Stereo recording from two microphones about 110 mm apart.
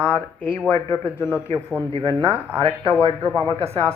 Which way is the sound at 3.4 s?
70° right (ahead or behind).